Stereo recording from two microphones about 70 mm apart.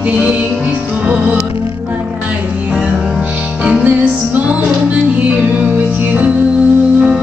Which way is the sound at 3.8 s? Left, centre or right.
Centre.